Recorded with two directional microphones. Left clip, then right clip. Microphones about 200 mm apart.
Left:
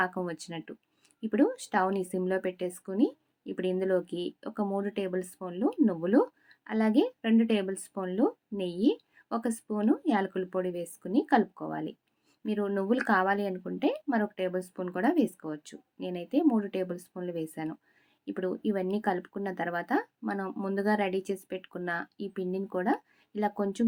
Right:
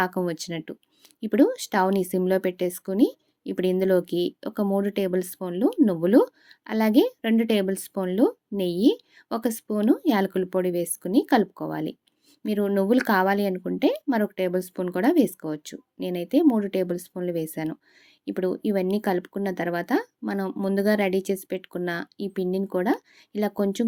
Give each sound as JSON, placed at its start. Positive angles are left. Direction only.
{"t": 0.0, "sound": "speech", "side_deg": -40}